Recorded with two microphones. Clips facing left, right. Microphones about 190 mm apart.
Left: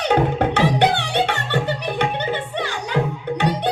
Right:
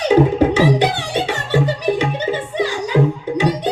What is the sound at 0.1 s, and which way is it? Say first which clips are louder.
Music: right 6 dB; 60° left (ahead or behind).